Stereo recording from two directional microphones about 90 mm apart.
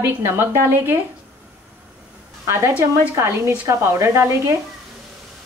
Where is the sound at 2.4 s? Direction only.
30° right (ahead or behind).